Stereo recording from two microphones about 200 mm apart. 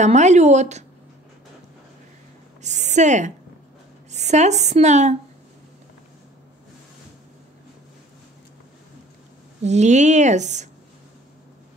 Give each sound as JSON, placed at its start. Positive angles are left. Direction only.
{"t": 0.0, "sound": "a woman's voice", "side_deg": -35}
{"t": 2.6, "sound": "a woman's voice", "side_deg": -35}
{"t": 9.6, "sound": "a woman's voice", "side_deg": -35}